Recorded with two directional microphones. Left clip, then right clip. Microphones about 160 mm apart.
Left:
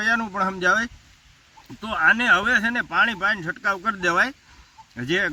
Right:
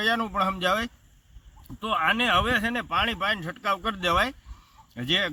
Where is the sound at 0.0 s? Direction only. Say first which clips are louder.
Left 2 dB; 40° right (ahead or behind).